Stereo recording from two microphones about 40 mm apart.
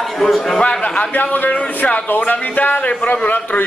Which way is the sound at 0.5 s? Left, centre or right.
Left.